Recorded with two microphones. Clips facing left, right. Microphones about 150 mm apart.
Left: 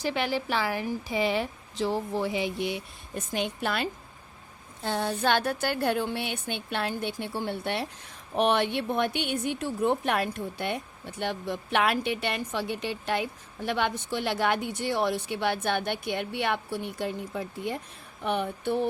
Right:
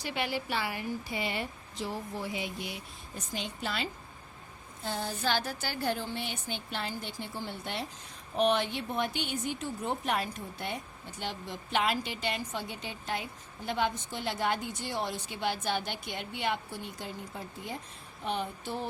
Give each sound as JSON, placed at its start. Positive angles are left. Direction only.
{"t": 0.0, "sound": "a woman's voice", "side_deg": 90}
{"t": 4.8, "sound": "speech", "side_deg": 70}